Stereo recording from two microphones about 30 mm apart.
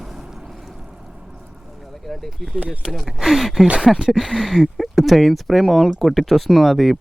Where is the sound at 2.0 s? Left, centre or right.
Centre.